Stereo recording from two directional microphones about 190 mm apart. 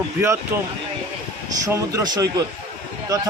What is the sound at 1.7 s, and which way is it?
Speech, 20° right (ahead or behind).